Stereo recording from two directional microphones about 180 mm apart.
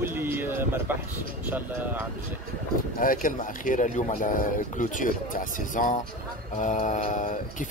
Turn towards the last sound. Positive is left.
turn(degrees=45)  # may be behind; listen again after turning